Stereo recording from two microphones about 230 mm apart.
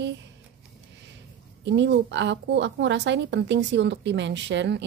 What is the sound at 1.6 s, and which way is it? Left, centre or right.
A woman's voice, right.